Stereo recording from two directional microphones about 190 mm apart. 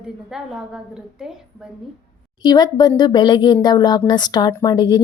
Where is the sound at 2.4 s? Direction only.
20° left (ahead or behind).